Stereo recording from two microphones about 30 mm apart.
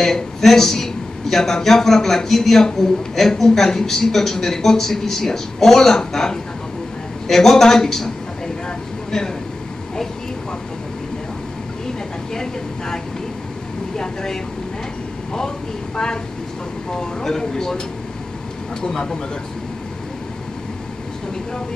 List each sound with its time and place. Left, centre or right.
0.0 s a woman's voice: centre
12.4 s vehicle: centre
13.9 s air conditioning: centre
17.4 s speech: centre